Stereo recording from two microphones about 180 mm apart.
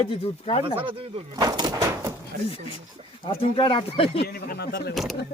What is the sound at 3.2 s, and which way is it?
Speech, 30° left (ahead or behind).